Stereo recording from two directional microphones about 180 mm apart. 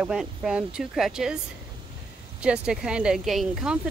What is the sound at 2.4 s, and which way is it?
Speech, 5° right (ahead or behind).